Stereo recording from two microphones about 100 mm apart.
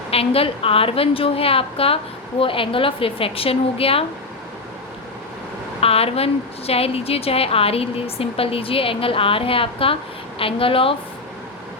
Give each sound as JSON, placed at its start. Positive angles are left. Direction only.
{"t": 0.1, "sound": "a woman's voice", "side_deg": 75}
{"t": 5.8, "sound": "a woman's voice", "side_deg": 75}